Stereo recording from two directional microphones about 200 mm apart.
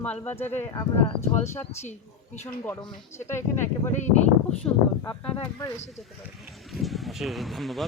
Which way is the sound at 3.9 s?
35° left (ahead or behind).